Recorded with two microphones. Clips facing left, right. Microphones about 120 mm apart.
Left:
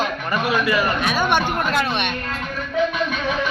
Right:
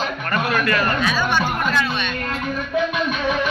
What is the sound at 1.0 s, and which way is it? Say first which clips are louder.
Speech: left 1 dB; 55° left (ahead or behind).